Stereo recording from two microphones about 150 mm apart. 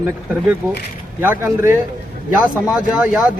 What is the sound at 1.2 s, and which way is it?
Speech, 15° right (ahead or behind).